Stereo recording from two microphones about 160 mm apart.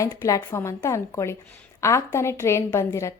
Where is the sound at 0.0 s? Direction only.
20° left (ahead or behind).